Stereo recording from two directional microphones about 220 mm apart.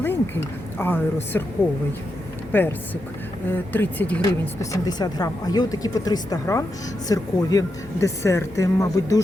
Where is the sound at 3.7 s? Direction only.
10° left (ahead or behind).